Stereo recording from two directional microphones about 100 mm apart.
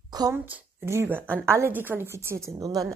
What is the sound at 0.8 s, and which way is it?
Speech, 25° right (ahead or behind).